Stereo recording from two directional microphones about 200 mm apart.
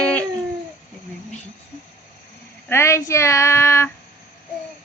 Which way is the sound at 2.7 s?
15° left (ahead or behind).